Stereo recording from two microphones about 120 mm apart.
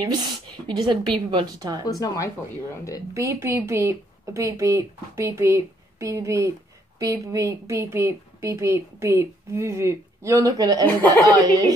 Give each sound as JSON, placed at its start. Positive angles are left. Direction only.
{"t": 0.0, "sound": "speech", "side_deg": -40}
{"t": 1.9, "sound": "speech", "side_deg": 30}
{"t": 3.2, "sound": "a woman's voice", "side_deg": -25}
{"t": 10.9, "sound": "speech", "side_deg": 15}
{"t": 11.2, "sound": "speech", "side_deg": -30}